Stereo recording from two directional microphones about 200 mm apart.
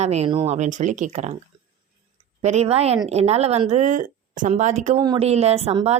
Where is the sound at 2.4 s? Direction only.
35° right (ahead or behind).